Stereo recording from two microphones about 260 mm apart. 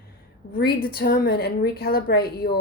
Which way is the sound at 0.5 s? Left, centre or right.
Left.